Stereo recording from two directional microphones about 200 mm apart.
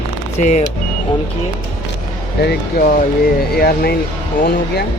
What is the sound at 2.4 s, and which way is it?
Speech, 55° left (ahead or behind).